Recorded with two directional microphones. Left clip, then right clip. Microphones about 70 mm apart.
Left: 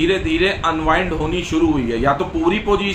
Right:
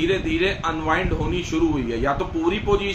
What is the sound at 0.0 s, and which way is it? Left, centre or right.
A man's voice, left.